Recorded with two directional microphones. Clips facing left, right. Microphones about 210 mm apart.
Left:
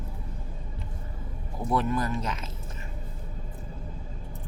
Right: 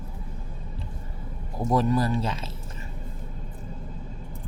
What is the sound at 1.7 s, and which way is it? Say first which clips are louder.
Speech: right 4 dB; 35° right (ahead or behind).